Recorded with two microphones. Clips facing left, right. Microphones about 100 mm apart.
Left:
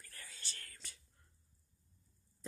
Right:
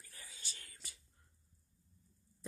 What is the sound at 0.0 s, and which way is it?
Whispering, 15° right (ahead or behind).